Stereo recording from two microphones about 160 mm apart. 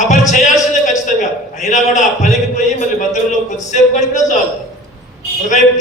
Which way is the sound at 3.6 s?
50° left (ahead or behind).